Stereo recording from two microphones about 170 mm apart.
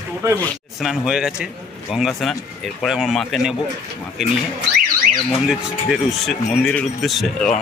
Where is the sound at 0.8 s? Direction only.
Centre (ahead or behind).